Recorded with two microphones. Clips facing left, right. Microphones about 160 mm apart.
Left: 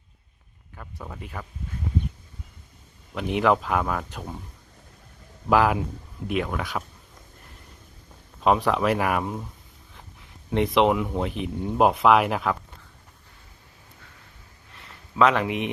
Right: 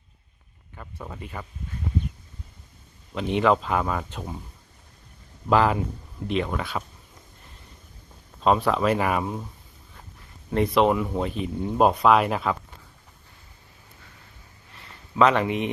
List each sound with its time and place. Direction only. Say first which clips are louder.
0.8 s speech: right 1 dB; 5° right (ahead or behind)
3.2 s speech: even; 5° left (ahead or behind)
5.5 s speech: even; 5° left (ahead or behind)
8.4 s speech: even; 10° left (ahead or behind)
10.8 s speech: even; 10° left (ahead or behind)
11.3 s speech: right 1 dB; 65° left (ahead or behind)
11.5 s speech: even; centre (ahead or behind)
14.7 s a sound: right 2 dB; centre (ahead or behind)